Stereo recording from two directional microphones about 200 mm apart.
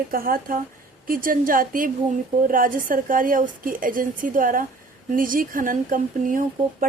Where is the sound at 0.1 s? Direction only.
45° right (ahead or behind).